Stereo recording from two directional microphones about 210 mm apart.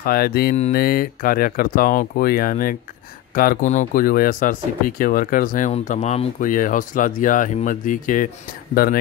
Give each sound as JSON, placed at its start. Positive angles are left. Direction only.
{"t": 0.0, "sound": "speech", "side_deg": 45}